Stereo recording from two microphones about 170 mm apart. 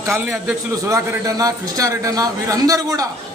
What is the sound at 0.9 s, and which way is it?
A man's voice, 20° right (ahead or behind).